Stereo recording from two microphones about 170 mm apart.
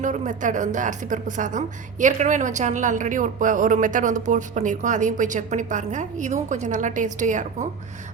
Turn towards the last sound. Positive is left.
turn(degrees=-45)  # may be behind; listen again after turning